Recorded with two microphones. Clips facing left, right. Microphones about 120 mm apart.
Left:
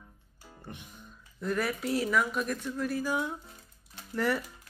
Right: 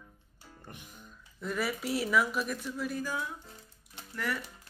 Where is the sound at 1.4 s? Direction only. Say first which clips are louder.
Left 3 dB; centre (ahead or behind).